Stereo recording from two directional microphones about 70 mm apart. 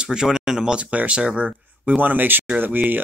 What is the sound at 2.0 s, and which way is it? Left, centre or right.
Speech, right.